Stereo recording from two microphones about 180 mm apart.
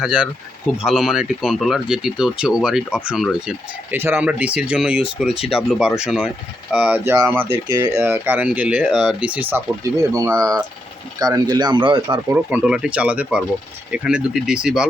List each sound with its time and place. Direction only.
0.0 s speech: 5° right (ahead or behind); by 12.2 s 25° right (ahead or behind)
12.3 s speech: 10° right (ahead or behind)